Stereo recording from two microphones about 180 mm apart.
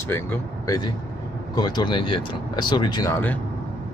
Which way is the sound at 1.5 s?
25° left (ahead or behind).